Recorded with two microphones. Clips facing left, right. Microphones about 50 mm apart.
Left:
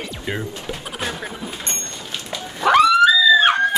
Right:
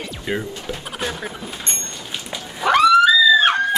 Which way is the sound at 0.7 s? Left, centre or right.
Centre.